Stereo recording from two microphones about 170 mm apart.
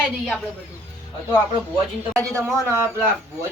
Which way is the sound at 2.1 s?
20° right (ahead or behind).